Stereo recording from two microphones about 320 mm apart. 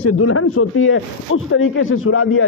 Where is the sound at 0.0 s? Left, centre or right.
Left.